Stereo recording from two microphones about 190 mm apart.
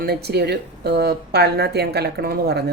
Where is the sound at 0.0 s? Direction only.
60° right (ahead or behind).